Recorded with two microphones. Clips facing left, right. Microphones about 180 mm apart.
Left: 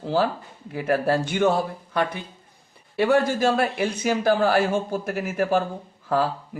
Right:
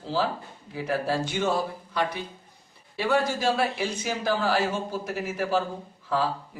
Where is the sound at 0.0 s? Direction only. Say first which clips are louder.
Left 5 dB; 60° left (ahead or behind).